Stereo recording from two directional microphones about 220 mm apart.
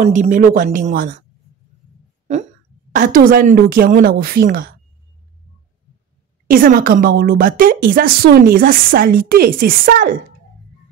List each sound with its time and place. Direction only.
0.0 s a woman's voice: 35° right (ahead or behind)
2.3 s a woman's voice: 35° right (ahead or behind)
6.4 s a woman's voice: 40° right (ahead or behind)